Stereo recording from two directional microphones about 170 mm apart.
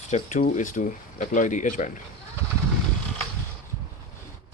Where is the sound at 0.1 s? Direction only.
45° left (ahead or behind).